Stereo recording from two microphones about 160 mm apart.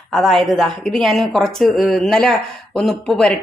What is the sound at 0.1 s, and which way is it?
Speech, centre (ahead or behind).